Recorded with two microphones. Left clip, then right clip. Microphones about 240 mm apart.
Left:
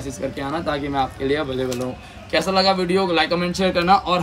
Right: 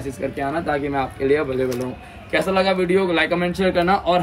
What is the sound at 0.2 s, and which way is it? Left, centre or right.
Speech, centre.